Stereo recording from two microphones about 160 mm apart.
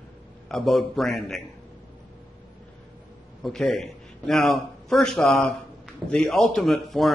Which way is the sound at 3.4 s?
Centre (ahead or behind).